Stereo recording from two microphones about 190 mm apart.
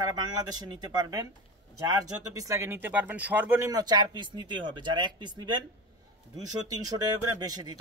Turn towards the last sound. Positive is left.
turn(degrees=-20)  # may be behind; listen again after turning